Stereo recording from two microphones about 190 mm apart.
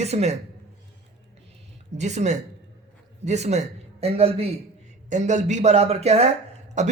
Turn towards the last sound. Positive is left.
turn(degrees=-40)  # may be behind; listen again after turning